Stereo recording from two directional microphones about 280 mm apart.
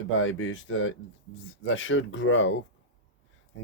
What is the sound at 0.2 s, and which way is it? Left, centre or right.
Speech, left.